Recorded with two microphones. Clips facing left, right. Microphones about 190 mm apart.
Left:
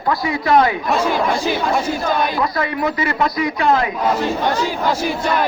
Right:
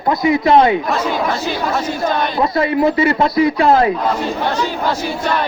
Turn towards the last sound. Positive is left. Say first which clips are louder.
# right 5 dB
turn(degrees=-30)  # may be behind; listen again after turning